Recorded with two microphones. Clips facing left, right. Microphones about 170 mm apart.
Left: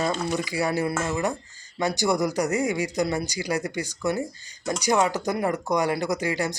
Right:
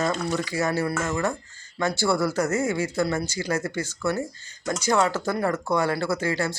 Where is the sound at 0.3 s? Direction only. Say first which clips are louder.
Even; 15° left (ahead or behind).